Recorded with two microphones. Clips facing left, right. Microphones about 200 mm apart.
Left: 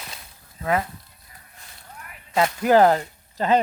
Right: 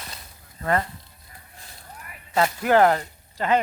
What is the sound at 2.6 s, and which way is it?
Speech, 20° left (ahead or behind).